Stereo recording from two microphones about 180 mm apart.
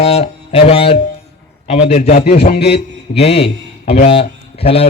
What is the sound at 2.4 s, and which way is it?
Speech, 65° left (ahead or behind).